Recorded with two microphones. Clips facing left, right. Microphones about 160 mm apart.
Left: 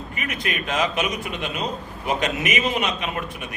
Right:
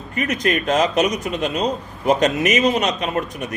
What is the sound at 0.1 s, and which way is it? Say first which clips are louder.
A man's voice: right 10 dB; 40° right (ahead or behind).